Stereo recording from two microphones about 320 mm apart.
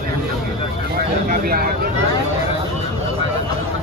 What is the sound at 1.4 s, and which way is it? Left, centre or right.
Speech, right.